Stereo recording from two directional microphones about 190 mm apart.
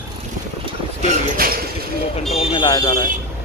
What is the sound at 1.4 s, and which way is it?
Speech, 50° right (ahead or behind).